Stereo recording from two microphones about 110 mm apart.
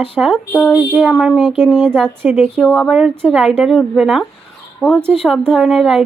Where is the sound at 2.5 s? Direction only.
5° left (ahead or behind).